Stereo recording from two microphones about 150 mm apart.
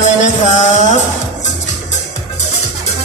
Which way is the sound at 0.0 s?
55° left (ahead or behind).